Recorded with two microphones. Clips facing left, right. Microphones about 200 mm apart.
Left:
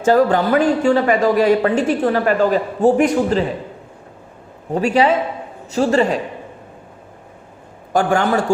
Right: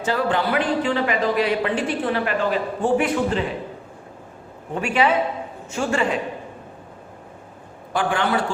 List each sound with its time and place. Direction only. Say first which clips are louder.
0.0 s a man's voice: left 8 dB; 45° left (ahead or behind)
4.7 s a man's voice: left 5 dB; 35° left (ahead or behind)
7.9 s a man's voice: left 5 dB; 45° left (ahead or behind)